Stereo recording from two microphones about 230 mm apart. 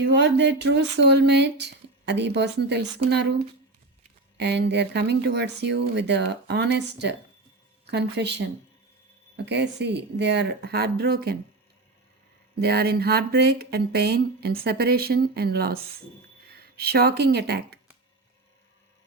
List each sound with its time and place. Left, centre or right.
0.0 s speech: right
4.4 s speech: right
12.5 s speech: right